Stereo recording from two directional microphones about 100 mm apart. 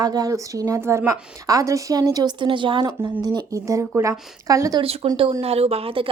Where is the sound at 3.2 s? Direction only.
40° right (ahead or behind).